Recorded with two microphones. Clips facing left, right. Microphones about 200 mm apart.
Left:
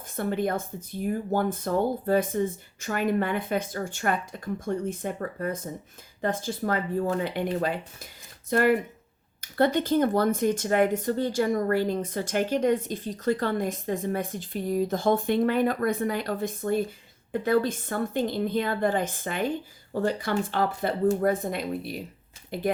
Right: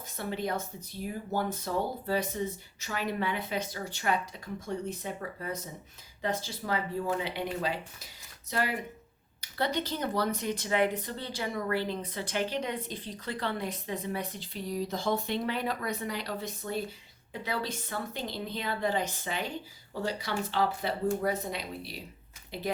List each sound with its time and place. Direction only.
0.2 s speech: 50° left (ahead or behind)